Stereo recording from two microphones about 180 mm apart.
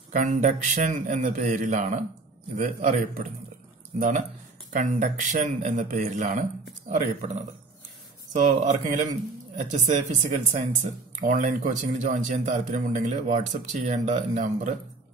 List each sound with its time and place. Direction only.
0.1 s speech: 45° right (ahead or behind)
4.7 s speech: 40° right (ahead or behind)